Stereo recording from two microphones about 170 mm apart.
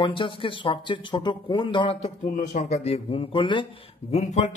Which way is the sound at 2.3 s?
45° left (ahead or behind).